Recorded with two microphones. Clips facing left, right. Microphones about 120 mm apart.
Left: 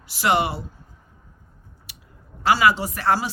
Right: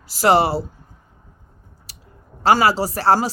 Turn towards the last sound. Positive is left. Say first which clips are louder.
# right 5 dB
turn(degrees=-35)  # may be behind; listen again after turning